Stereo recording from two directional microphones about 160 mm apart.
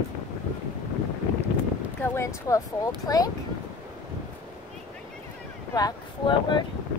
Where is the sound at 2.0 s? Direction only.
15° left (ahead or behind).